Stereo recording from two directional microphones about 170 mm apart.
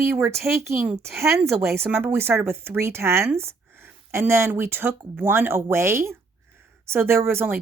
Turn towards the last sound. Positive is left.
turn(degrees=-15)  # may be behind; listen again after turning